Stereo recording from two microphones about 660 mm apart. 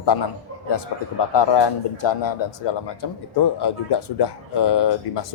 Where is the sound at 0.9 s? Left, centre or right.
Left.